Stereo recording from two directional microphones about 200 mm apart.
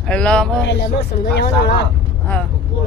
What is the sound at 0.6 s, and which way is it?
Speech, 55° left (ahead or behind).